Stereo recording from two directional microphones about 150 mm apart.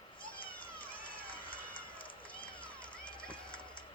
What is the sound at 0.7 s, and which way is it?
Run, 35° left (ahead or behind).